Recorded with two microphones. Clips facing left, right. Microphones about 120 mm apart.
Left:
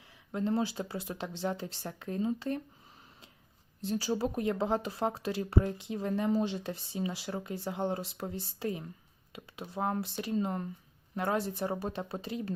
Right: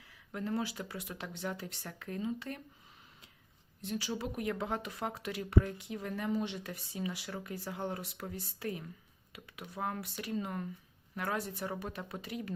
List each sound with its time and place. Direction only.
0.3 s speech: 25° left (ahead or behind)
3.8 s speech: 35° left (ahead or behind)